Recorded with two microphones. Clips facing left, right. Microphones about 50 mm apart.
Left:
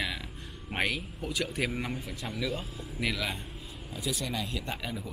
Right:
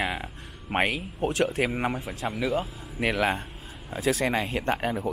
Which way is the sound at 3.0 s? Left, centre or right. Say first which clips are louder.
Right 8 dB; right.